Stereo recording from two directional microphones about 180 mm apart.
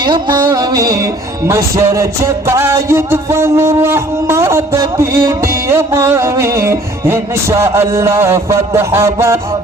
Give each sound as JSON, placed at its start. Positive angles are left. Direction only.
{"t": 0.0, "sound": "music", "side_deg": -25}